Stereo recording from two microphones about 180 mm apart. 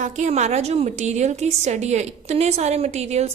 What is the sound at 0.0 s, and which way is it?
A woman's voice, 40° right (ahead or behind).